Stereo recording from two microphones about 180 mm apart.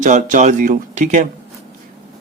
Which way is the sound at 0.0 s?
45° right (ahead or behind).